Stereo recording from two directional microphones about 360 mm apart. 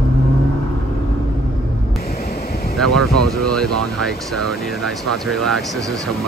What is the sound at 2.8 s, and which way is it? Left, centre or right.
Speech, centre.